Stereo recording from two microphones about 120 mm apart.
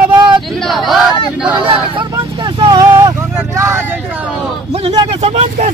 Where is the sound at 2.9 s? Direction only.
20° right (ahead or behind).